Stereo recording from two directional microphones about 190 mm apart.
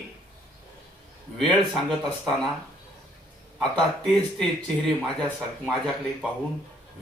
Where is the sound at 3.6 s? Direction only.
5° left (ahead or behind).